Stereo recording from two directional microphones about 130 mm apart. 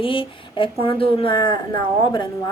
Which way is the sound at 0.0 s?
40° left (ahead or behind).